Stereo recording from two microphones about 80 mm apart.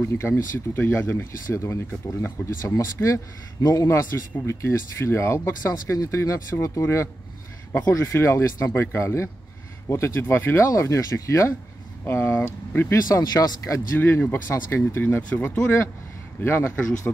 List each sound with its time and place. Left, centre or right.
0.0 s speech: left
12.9 s speech: left
13.7 s speech: left
15.2 s speech: centre
16.3 s speech: left